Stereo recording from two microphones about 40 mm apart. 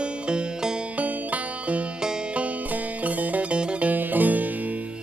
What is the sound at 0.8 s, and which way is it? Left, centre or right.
Music, right.